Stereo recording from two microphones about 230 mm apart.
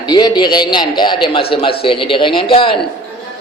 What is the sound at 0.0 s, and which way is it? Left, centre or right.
A man's voice, centre.